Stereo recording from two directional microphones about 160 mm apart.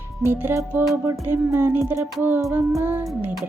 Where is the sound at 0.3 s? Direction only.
15° right (ahead or behind).